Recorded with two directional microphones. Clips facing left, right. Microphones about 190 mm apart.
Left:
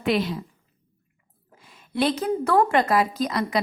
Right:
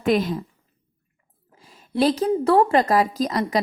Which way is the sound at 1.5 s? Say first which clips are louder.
Right 3 dB; 35° right (ahead or behind).